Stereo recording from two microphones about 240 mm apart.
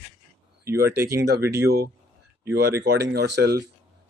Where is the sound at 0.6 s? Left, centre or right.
Right.